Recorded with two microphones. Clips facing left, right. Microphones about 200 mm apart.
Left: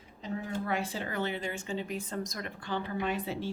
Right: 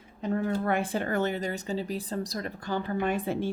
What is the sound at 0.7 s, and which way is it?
A woman's voice, 55° right (ahead or behind).